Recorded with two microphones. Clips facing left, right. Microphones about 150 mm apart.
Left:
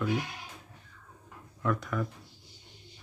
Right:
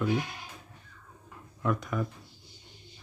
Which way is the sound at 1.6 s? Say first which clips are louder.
Right 1 dB; 15° right (ahead or behind).